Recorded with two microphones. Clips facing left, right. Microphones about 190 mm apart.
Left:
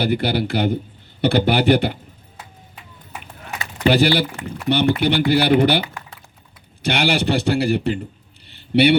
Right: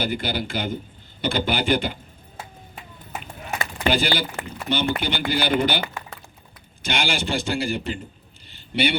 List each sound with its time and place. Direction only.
0.0 s a man's voice: 65° left (ahead or behind)
3.8 s a man's voice: 65° left (ahead or behind)
6.8 s a man's voice: 65° left (ahead or behind)
8.4 s a sound: 65° left (ahead or behind)